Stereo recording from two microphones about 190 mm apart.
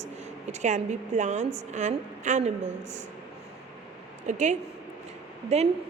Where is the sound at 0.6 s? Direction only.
40° right (ahead or behind).